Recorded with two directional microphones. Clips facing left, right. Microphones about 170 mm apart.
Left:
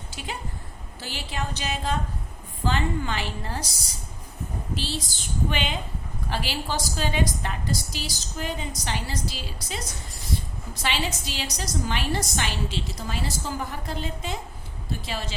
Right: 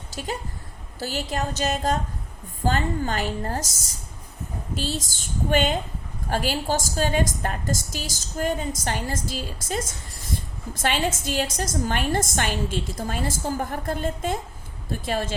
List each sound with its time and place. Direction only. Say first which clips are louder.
0.1 s a woman's voice: right 5 dB; 40° right (ahead or behind)